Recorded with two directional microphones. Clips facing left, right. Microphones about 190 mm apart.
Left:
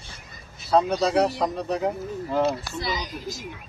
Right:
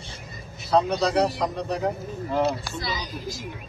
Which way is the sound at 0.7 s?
5° left (ahead or behind).